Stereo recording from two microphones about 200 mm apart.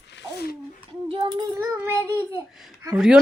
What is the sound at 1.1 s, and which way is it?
Child singing, 25° right (ahead or behind).